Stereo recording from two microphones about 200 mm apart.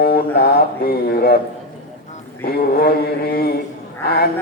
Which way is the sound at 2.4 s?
50° left (ahead or behind).